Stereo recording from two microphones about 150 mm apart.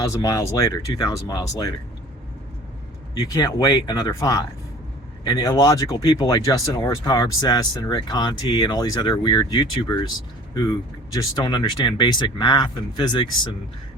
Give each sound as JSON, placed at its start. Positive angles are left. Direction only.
{"t": 0.0, "sound": "speech", "side_deg": 20}
{"t": 3.3, "sound": "speech", "side_deg": 25}